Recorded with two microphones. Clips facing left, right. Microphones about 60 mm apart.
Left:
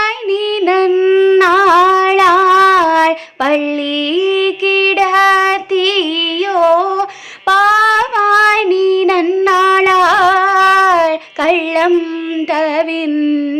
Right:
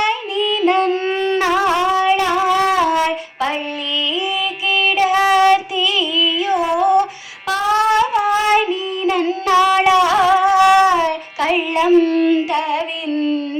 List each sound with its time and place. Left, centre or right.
0.6 s a sound: left
0.9 s shofar: centre
1.4 s shofar: left
2.0 s female singing: left
2.2 s female singing: left
5.0 s child singing: left
6.5 s a sound: left
7.6 s child singing: left
9.4 s a sound: left
10.0 s singing: left
10.5 s child singing: left
13.1 s a sound: left